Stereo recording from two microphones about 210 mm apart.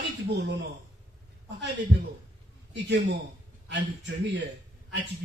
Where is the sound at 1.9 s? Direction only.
60° right (ahead or behind).